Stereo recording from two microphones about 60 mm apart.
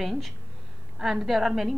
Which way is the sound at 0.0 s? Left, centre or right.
Centre.